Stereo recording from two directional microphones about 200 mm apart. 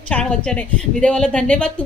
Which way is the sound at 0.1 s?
5° left (ahead or behind).